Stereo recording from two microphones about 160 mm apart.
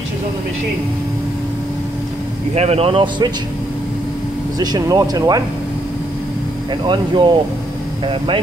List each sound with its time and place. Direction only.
2.5 s speech: 40° right (ahead or behind)
4.6 s speech: 20° right (ahead or behind)
6.7 s speech: 30° right (ahead or behind)